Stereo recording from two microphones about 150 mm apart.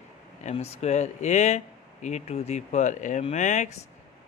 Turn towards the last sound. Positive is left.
turn(degrees=55)  # may be behind; listen again after turning